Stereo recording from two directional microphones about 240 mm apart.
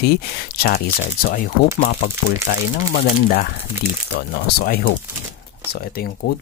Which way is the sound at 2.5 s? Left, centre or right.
Left.